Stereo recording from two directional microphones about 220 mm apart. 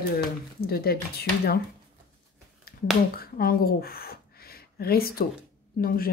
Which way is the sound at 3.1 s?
40° left (ahead or behind).